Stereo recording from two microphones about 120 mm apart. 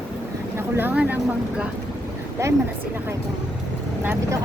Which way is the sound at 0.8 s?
15° right (ahead or behind).